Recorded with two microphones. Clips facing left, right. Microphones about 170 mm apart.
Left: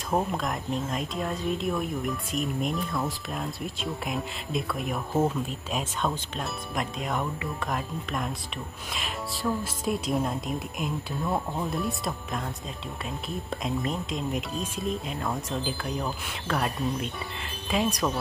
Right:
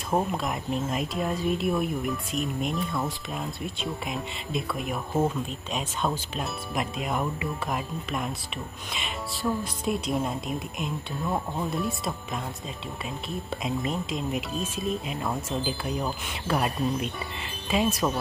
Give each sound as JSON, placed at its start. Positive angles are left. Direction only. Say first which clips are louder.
{"t": 0.1, "sound": "speech", "louder": "right 1 dB", "side_deg": -5}
{"t": 13.6, "sound": "speech", "louder": "right 1 dB", "side_deg": -5}